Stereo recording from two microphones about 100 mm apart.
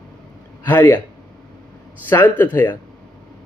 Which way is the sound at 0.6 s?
20° left (ahead or behind).